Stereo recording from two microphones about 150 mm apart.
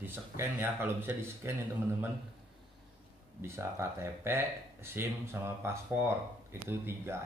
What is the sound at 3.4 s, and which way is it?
Speech, 15° right (ahead or behind).